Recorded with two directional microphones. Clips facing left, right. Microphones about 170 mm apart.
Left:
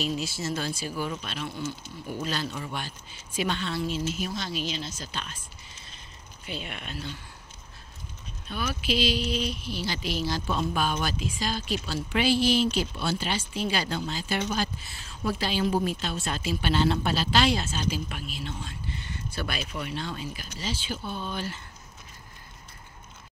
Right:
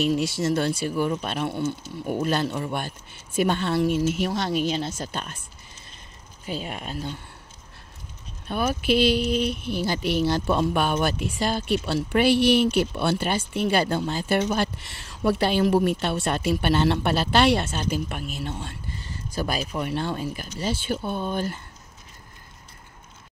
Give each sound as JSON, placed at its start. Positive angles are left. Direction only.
{"t": 0.0, "sound": "speech", "side_deg": -65}
{"t": 6.4, "sound": "speech", "side_deg": -40}
{"t": 8.5, "sound": "speech", "side_deg": -55}
{"t": 18.9, "sound": "speech", "side_deg": -35}